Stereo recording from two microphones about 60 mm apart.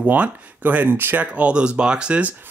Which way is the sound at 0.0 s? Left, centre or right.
Right.